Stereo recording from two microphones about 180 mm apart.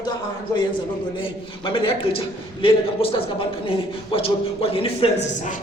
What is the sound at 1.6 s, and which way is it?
A man's voice, 30° left (ahead or behind).